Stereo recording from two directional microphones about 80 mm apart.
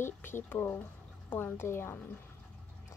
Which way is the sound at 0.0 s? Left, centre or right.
Left.